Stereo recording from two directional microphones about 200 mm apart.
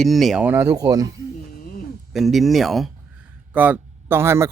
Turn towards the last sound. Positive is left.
turn(degrees=-15)  # may be behind; listen again after turning